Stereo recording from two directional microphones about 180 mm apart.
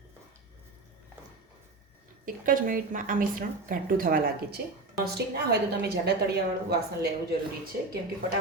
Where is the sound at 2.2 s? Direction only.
50° right (ahead or behind).